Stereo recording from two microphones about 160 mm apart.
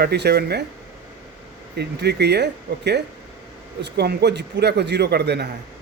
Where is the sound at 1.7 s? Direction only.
90° right.